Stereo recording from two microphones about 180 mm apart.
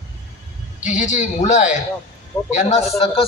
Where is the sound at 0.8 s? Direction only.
40° left (ahead or behind).